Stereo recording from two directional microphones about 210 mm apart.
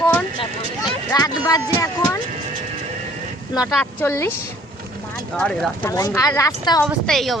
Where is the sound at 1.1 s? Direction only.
15° left (ahead or behind).